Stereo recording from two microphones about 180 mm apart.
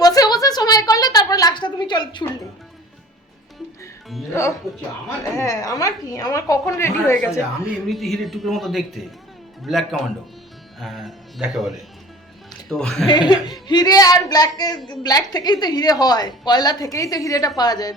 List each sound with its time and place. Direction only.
0.0 s a sound: 20° left (ahead or behind)
5.4 s a woman's voice: 20° left (ahead or behind)
7.9 s speech: centre (ahead or behind)
13.1 s a woman's voice: 25° left (ahead or behind)